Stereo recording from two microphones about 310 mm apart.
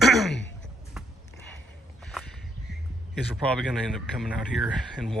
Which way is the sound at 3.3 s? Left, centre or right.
Centre.